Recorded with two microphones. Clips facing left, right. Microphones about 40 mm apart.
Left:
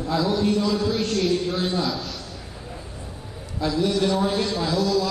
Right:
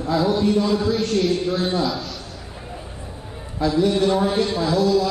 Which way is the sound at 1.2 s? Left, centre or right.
Centre.